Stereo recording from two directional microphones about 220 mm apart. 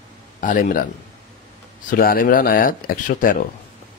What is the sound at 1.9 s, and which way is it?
Speech, 40° left (ahead or behind).